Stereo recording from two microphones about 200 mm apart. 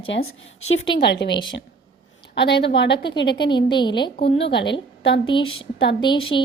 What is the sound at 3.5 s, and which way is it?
Speech, 25° left (ahead or behind).